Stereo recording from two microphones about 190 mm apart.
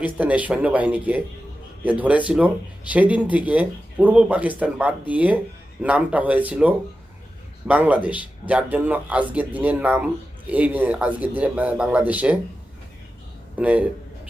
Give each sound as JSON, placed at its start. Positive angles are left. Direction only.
{"t": 0.0, "sound": "speech", "side_deg": -10}
{"t": 13.6, "sound": "speech", "side_deg": -10}